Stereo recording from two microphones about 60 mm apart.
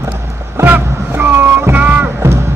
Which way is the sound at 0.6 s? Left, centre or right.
Right.